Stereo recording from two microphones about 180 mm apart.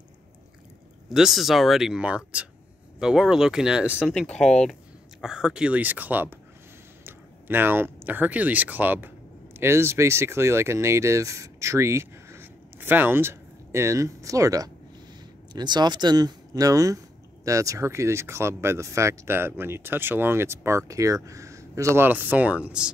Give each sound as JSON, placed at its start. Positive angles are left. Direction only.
{"t": 1.0, "sound": "speech", "side_deg": 0}